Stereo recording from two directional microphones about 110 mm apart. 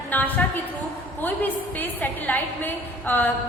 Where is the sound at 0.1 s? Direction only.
15° left (ahead or behind).